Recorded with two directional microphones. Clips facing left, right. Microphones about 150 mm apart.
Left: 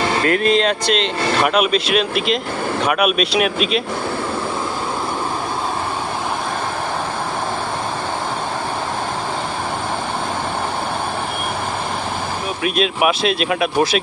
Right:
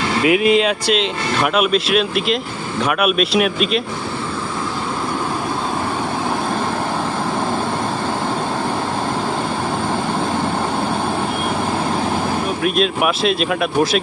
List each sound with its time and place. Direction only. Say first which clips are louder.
0.2 s speech: right 4 dB; 10° right (ahead or behind)
12.6 s speech: left 1 dB; centre (ahead or behind)